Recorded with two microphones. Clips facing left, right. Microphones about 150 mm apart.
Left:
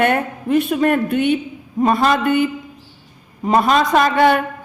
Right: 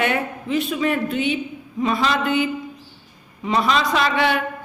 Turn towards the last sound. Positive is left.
turn(degrees=45)  # may be behind; listen again after turning